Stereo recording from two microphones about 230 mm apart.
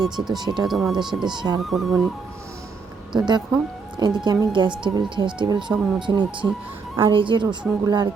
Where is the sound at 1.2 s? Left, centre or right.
Centre.